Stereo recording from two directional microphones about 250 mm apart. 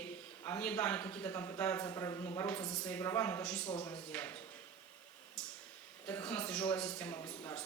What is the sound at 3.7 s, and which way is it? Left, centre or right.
Speech, centre.